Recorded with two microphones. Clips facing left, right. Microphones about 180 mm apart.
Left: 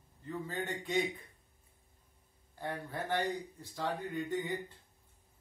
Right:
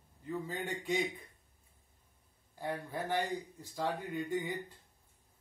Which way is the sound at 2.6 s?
10° right (ahead or behind).